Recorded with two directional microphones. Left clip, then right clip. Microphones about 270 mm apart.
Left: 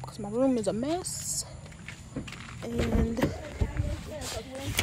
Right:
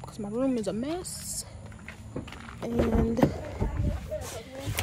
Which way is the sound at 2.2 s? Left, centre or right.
Centre.